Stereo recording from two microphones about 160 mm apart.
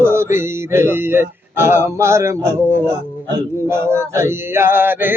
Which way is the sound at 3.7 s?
15° right (ahead or behind).